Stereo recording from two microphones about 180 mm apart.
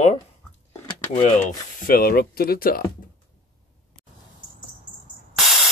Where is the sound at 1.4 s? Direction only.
50° left (ahead or behind).